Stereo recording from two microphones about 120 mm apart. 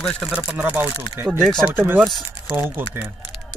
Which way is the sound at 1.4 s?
5° left (ahead or behind).